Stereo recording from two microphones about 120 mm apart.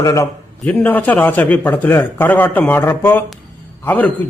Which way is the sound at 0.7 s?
15° left (ahead or behind).